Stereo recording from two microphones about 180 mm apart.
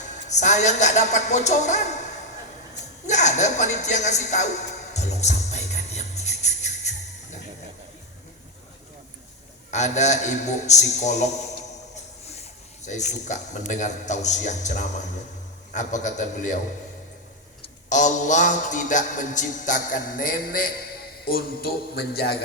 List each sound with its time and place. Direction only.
0.3 s a man's voice: 40° left (ahead or behind)
3.1 s music: 40° left (ahead or behind)
9.7 s a man's voice: 40° left (ahead or behind)
15.7 s music: 45° left (ahead or behind)
17.8 s music: 45° left (ahead or behind)
21.2 s a man's voice: 60° left (ahead or behind)